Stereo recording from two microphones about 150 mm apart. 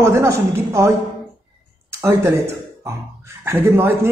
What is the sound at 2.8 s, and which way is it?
Speech, 15° right (ahead or behind).